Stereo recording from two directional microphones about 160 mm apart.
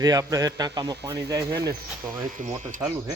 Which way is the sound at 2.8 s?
15° right (ahead or behind).